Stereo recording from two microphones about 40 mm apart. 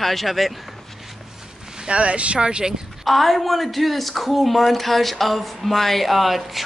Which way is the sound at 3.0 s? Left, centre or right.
Centre.